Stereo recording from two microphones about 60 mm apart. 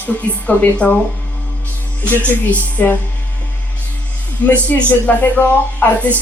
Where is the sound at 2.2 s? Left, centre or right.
Left.